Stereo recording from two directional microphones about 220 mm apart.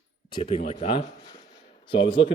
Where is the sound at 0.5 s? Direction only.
30° left (ahead or behind).